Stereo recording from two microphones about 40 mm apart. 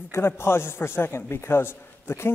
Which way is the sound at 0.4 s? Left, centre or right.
Left.